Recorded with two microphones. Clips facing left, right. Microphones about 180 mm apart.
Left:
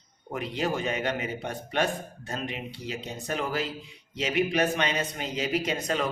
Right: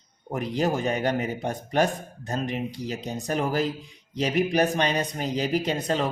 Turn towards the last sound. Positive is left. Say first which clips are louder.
# right 3 dB
turn(degrees=-30)  # may be behind; listen again after turning